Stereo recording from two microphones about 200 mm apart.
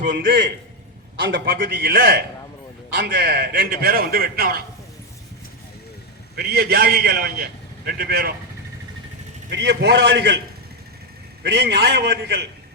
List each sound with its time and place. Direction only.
1.3 s a man's voice: 45° right (ahead or behind)
6.3 s a man's voice: 55° right (ahead or behind)
9.5 s a man's voice: 60° right (ahead or behind)
11.4 s a man's voice: 55° right (ahead or behind)